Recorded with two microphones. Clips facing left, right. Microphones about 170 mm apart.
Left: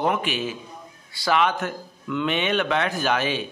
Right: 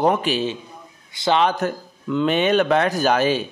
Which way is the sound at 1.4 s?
35° right (ahead or behind).